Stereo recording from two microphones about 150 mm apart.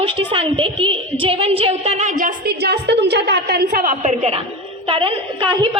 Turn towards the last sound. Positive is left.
turn(degrees=-30)  # may be behind; listen again after turning